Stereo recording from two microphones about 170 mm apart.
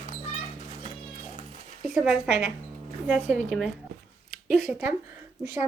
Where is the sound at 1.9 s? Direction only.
5° right (ahead or behind).